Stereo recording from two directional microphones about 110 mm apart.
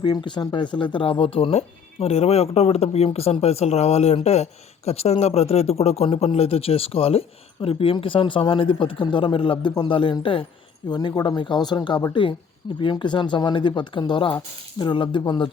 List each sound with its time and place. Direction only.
0.0 s a man's voice: 45° left (ahead or behind)
10.8 s a man's voice: 40° left (ahead or behind)